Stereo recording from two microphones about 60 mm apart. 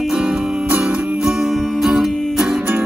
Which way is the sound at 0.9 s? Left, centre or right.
Right.